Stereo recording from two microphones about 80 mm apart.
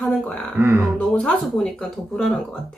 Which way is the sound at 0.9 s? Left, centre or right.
Centre.